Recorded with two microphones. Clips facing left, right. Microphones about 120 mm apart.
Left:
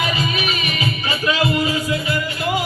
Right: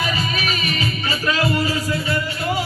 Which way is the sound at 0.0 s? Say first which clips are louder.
Left 2 dB; 35° right (ahead or behind).